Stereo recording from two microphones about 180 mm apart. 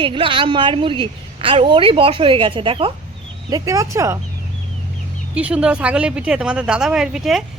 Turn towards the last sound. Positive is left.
turn(degrees=0)  # may be behind; listen again after turning